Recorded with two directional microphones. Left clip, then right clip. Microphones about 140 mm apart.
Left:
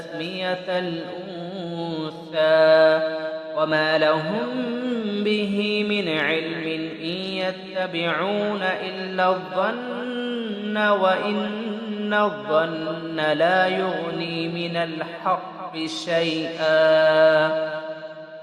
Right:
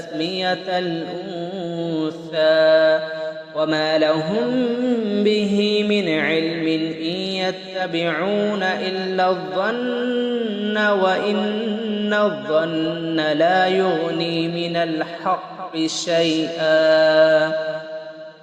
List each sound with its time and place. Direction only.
0.2 s mantra: 40° right (ahead or behind)
1.8 s mantra: 15° right (ahead or behind)
2.3 s mantra: 40° right (ahead or behind)
5.2 s mantra: 35° right (ahead or behind)
5.9 s mantra: 25° right (ahead or behind)
8.1 s mantra: 20° right (ahead or behind)
8.6 s mantra: 40° right (ahead or behind)
9.1 s mantra: 25° right (ahead or behind)
10.7 s a sound: 40° right (ahead or behind)
12.0 s mantra: 25° right (ahead or behind)